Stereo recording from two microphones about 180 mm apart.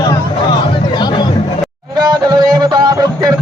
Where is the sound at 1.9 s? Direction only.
20° right (ahead or behind).